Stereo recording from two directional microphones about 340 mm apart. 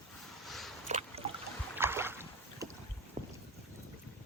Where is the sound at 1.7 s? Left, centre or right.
Centre.